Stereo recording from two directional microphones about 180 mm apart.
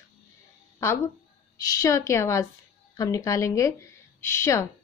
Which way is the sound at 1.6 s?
20° left (ahead or behind).